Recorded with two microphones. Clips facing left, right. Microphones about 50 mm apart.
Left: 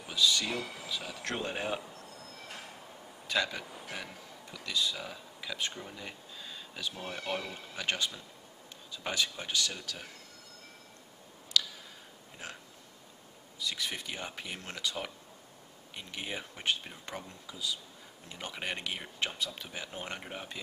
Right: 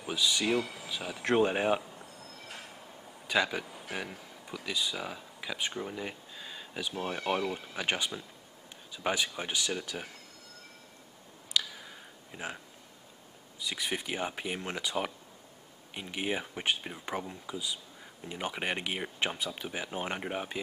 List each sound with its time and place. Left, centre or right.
0.0 s speech: centre
0.6 s speech: centre
0.8 s speech: centre
3.3 s speech: centre
11.6 s a sound: right
12.3 s speech: right
13.6 s speech: centre